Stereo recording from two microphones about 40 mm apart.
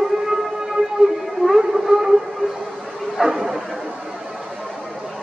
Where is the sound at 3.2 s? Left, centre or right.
Centre.